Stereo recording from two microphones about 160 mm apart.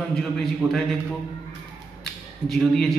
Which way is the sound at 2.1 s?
Centre (ahead or behind).